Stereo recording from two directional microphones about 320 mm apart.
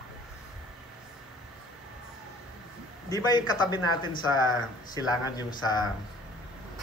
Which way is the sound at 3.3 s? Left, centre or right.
Centre.